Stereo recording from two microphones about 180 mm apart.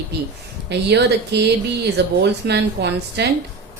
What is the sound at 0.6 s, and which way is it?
Speech, 70° right (ahead or behind).